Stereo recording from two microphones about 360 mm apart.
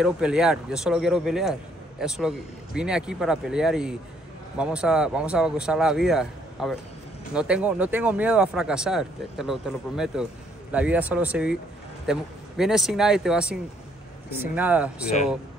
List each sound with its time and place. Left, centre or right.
0.0 s a man's voice: centre